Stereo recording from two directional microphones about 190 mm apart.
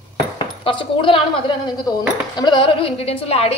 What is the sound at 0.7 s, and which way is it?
Speech, 25° left (ahead or behind).